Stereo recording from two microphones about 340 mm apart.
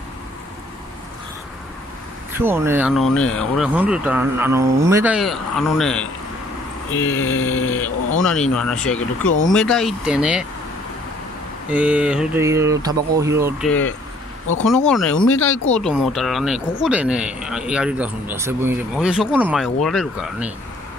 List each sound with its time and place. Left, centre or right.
2.3 s speech: centre
7.1 s speech: left
8.2 s speech: centre
11.7 s speech: centre
13.7 s speech: centre
15.1 s speech: left
15.7 s speech: centre